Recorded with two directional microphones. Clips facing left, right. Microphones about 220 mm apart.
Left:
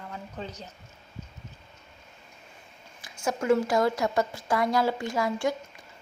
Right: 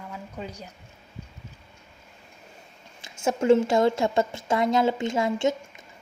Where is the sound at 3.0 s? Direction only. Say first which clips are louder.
Right 5 dB; 25° right (ahead or behind).